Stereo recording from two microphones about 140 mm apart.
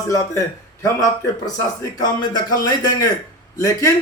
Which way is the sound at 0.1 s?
25° left (ahead or behind).